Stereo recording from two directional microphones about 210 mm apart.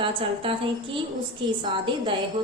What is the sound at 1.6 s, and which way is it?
Speech, 25° right (ahead or behind).